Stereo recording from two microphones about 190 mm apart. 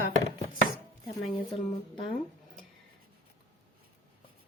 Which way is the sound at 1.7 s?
25° left (ahead or behind).